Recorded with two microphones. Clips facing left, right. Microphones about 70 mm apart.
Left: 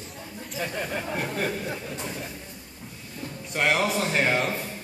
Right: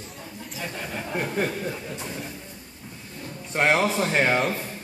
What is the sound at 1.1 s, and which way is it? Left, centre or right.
Speech, centre.